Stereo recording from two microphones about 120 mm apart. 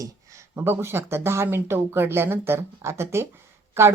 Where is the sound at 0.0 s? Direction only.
25° right (ahead or behind).